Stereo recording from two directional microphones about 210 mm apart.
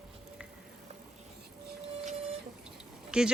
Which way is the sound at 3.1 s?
5° right (ahead or behind).